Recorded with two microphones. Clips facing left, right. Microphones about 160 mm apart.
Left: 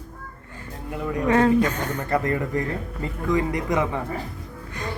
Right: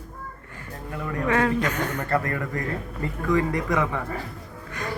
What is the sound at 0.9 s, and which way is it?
A woman's voice, 20° left (ahead or behind).